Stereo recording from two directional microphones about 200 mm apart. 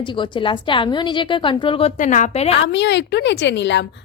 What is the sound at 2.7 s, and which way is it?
A woman's voice, 60° left (ahead or behind).